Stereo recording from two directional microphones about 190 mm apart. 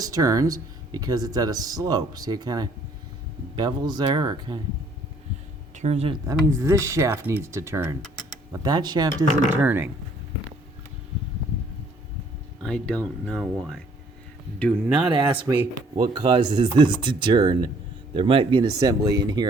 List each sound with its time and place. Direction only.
0.0 s speech: 20° right (ahead or behind)
5.7 s speech: 35° right (ahead or behind)
6.2 s speech: 15° right (ahead or behind)
9.5 s speech: 10° right (ahead or behind)
12.6 s speech: 5° left (ahead or behind)
14.8 s speech: 5° right (ahead or behind)
15.1 s speech: 25° right (ahead or behind)